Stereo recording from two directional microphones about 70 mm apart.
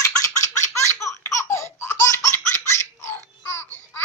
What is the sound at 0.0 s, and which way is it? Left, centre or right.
Laughter, left.